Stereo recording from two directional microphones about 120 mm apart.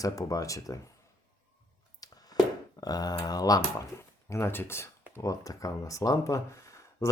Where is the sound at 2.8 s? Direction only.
35° left (ahead or behind).